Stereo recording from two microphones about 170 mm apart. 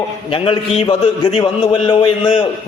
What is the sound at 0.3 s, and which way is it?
A man's voice, 30° left (ahead or behind).